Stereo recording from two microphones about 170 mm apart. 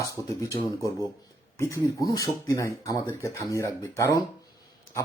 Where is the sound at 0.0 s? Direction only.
20° left (ahead or behind).